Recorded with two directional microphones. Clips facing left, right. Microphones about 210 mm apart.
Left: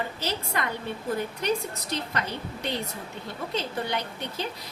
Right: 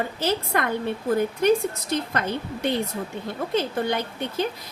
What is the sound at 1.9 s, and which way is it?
Speech, 55° right (ahead or behind).